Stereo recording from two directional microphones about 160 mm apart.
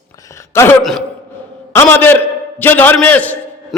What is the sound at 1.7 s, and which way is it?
A man's voice, 15° left (ahead or behind).